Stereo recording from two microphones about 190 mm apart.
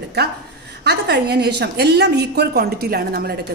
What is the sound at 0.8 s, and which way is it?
A woman's voice, 60° right (ahead or behind).